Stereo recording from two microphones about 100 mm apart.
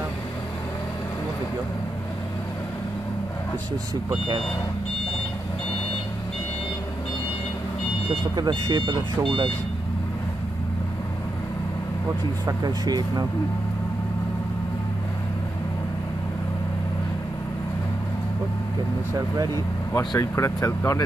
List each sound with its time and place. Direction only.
8.4 s speech: 45° right (ahead or behind)
12.4 s speech: 40° right (ahead or behind)
19.1 s speech: 40° right (ahead or behind)
20.2 s speech: 30° left (ahead or behind)